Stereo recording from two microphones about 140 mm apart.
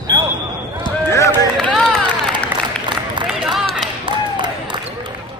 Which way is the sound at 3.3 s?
Centre (ahead or behind).